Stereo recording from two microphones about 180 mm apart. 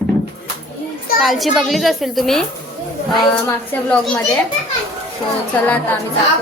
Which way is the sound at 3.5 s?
10° left (ahead or behind).